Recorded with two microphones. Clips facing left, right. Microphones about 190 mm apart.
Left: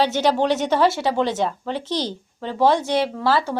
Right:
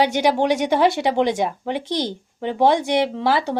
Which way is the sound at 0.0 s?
15° right (ahead or behind).